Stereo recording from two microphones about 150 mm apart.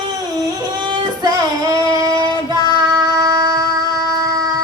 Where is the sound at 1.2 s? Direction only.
25° right (ahead or behind).